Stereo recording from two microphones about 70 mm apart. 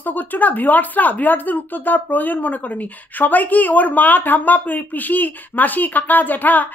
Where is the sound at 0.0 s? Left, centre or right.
Left.